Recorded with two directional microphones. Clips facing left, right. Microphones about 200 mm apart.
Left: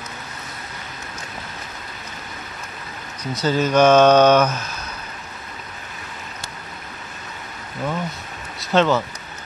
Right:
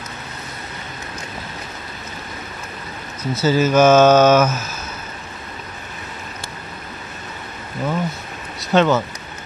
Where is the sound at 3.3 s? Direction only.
5° right (ahead or behind).